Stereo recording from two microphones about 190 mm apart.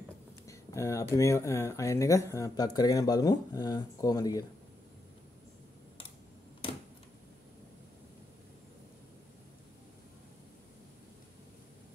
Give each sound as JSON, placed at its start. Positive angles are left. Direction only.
{"t": 0.5, "sound": "speech", "side_deg": 15}